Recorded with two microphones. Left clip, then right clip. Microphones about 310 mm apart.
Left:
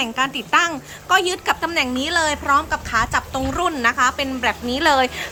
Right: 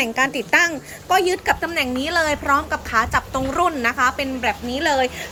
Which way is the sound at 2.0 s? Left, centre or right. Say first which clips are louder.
Even; centre.